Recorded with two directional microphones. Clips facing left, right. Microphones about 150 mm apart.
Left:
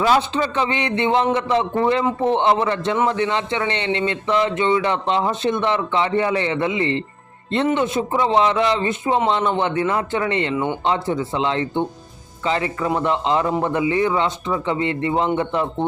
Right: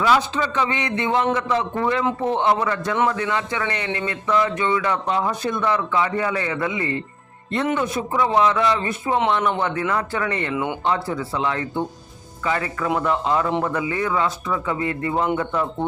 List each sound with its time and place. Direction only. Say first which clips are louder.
0.0 s speech: left 2 dB; 30° left (ahead or behind)
10.5 s speech: left 2 dB; centre (ahead or behind)
10.8 s speech: left 2 dB; 25° left (ahead or behind)